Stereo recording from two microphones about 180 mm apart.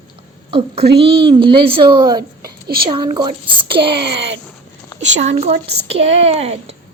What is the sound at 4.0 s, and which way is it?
Speech, 70° right (ahead or behind).